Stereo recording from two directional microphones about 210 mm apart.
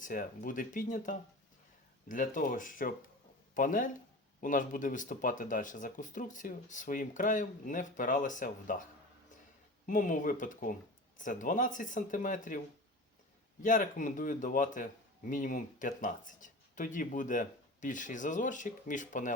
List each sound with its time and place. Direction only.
0.0 s speech: 40° left (ahead or behind)